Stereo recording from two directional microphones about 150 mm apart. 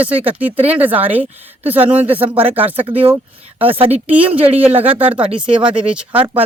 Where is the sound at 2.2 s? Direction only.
40° right (ahead or behind).